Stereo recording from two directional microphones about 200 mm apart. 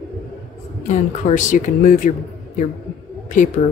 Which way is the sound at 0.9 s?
35° left (ahead or behind).